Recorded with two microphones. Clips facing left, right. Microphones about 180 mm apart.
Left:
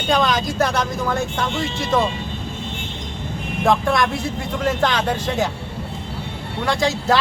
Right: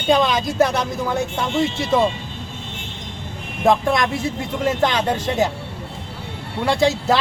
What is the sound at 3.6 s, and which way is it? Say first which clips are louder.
Speech: right 1 dB; 20° right (ahead or behind).